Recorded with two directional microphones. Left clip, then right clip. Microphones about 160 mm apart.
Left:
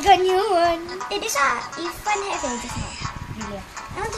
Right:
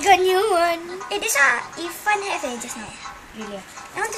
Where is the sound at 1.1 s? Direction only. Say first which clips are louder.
Right 3 dB; centre (ahead or behind).